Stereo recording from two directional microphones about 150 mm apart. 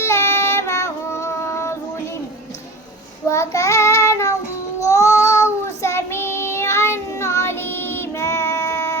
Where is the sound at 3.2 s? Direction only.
20° left (ahead or behind).